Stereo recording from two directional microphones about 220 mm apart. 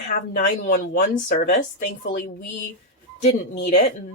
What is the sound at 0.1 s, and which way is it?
Speech, 35° left (ahead or behind).